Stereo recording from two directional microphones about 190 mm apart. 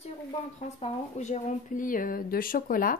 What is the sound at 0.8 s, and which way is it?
Speech, 35° left (ahead or behind).